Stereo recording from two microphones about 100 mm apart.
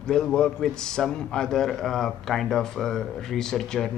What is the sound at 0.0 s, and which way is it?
A man's voice, 5° left (ahead or behind).